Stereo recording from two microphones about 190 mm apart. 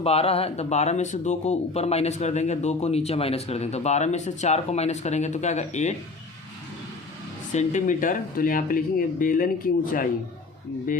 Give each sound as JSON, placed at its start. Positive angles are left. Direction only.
{"t": 0.0, "sound": "speech", "side_deg": 30}
{"t": 7.5, "sound": "speech", "side_deg": 40}